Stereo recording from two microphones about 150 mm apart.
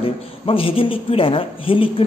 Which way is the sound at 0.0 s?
40° left (ahead or behind).